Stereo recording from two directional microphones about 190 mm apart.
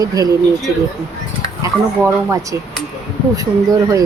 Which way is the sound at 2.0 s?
15° right (ahead or behind).